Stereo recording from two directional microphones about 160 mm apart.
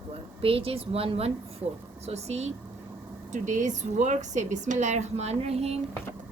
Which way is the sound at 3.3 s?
50° right (ahead or behind).